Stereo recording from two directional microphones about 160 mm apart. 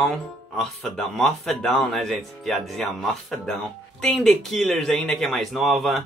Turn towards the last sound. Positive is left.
turn(degrees=0)  # may be behind; listen again after turning